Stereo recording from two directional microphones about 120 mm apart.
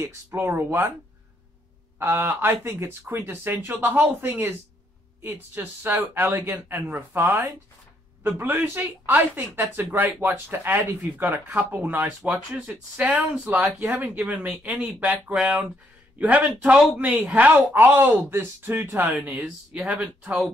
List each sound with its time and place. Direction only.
0.0 s speech: 20° right (ahead or behind)
2.0 s speech: 20° right (ahead or behind)